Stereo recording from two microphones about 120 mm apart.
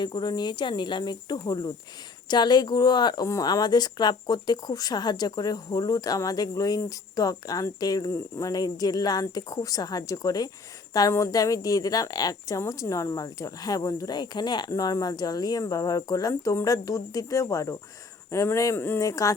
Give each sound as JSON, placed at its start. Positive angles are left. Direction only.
{"t": 0.0, "sound": "a woman's voice", "side_deg": 35}